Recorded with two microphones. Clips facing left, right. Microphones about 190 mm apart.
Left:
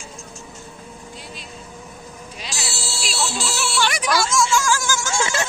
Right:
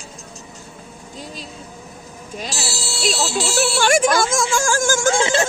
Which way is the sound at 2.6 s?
40° right (ahead or behind).